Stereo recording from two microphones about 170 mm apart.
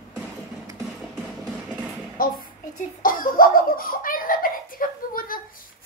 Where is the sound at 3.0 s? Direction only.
55° left (ahead or behind).